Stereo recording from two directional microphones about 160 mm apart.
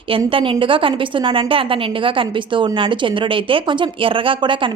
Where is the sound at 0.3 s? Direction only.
30° right (ahead or behind).